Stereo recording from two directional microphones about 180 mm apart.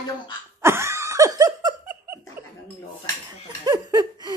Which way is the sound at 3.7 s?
20° right (ahead or behind).